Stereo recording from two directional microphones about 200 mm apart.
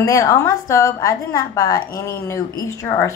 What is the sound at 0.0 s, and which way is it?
A woman's voice, 15° left (ahead or behind).